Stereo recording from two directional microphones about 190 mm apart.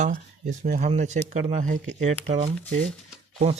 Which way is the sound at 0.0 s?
40° right (ahead or behind).